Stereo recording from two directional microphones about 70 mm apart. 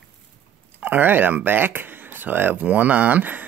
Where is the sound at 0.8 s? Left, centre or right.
Right.